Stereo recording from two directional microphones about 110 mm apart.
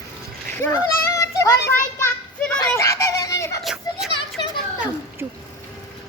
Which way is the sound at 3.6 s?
Centre (ahead or behind).